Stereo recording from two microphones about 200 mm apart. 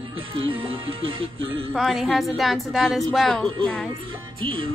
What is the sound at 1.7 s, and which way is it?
A woman's voice, centre (ahead or behind).